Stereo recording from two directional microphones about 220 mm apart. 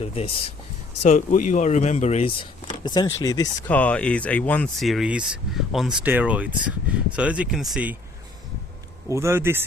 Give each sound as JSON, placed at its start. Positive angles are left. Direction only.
{"t": 0.0, "sound": "speech", "side_deg": 25}
{"t": 1.0, "sound": "speech", "side_deg": 35}
{"t": 2.8, "sound": "speech", "side_deg": 20}
{"t": 9.0, "sound": "a man's voice", "side_deg": -15}